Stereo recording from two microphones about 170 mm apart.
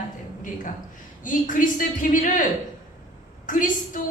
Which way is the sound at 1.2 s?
50° left (ahead or behind).